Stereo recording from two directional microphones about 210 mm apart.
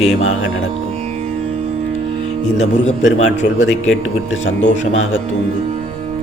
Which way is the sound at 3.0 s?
65° left (ahead or behind).